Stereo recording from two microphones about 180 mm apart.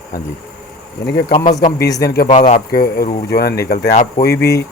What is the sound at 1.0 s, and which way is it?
Speech, 65° left (ahead or behind).